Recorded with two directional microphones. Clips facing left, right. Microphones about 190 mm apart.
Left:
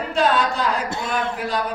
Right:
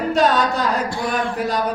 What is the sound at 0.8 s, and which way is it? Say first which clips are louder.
Speech: right 2 dB; 25° left (ahead or behind).